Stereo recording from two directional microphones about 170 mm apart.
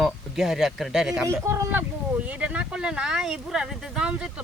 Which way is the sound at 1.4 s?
15° right (ahead or behind).